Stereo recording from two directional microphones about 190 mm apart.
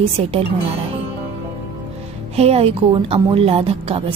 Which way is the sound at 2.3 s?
35° right (ahead or behind).